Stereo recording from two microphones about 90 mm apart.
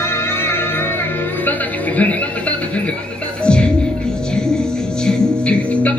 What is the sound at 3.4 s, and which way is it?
Music, 10° left (ahead or behind).